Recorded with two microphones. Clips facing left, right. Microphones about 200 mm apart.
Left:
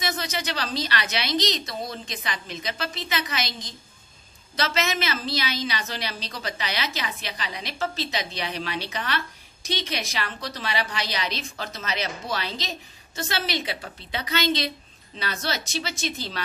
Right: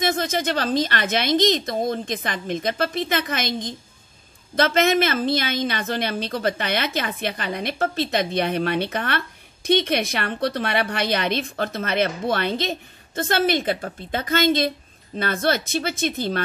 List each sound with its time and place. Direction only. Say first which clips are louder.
0.0 s a woman's voice: right 7 dB; 50° right (ahead or behind)